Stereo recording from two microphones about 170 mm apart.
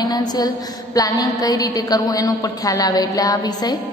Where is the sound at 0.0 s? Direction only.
25° left (ahead or behind).